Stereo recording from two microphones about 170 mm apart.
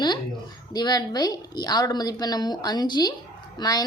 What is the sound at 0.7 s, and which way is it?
A woman's voice, 25° left (ahead or behind).